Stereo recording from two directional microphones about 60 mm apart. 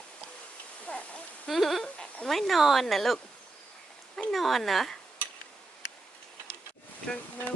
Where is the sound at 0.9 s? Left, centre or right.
Centre.